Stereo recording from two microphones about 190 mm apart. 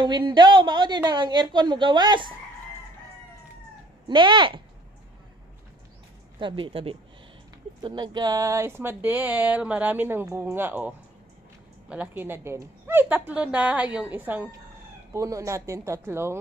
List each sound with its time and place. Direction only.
0.0 s a woman's voice: 25° right (ahead or behind)
4.1 s a woman's voice: 25° right (ahead or behind)
6.4 s a woman's voice: 30° right (ahead or behind)